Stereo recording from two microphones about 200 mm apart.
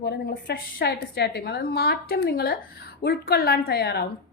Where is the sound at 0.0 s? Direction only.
55° left (ahead or behind).